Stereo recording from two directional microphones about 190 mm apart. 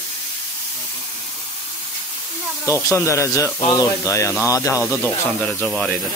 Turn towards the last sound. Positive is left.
turn(degrees=5)  # may be behind; listen again after turning